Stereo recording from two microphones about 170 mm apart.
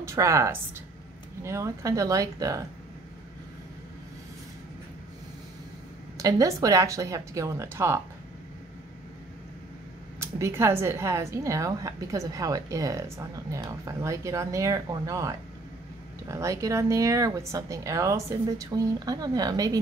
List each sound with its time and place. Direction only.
0.0 s a woman's voice: 20° right (ahead or behind)
6.1 s a woman's voice: 20° right (ahead or behind)
10.4 s a woman's voice: 15° right (ahead or behind)